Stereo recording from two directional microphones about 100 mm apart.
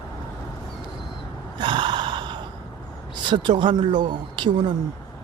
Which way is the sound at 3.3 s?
55° right (ahead or behind).